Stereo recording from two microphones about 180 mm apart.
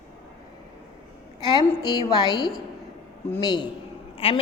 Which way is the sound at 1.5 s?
20° left (ahead or behind).